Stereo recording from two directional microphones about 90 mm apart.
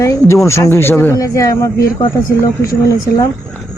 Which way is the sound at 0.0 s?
35° left (ahead or behind).